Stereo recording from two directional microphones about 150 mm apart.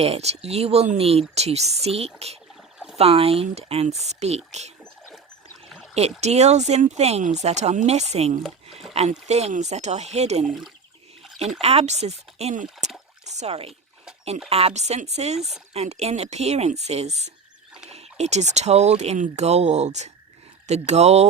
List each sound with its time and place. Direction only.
0.0 s speech: 45° right (ahead or behind)
4.8 s rowboat: 5° left (ahead or behind)
5.6 s pour: 5° left (ahead or behind)
5.9 s speech: 45° right (ahead or behind)
11.6 s speech: 45° right (ahead or behind)